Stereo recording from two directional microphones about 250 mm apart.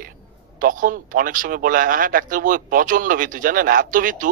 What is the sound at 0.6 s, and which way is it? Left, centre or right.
Speech, right.